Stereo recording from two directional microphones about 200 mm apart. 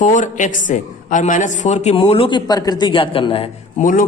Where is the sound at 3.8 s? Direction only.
40° left (ahead or behind).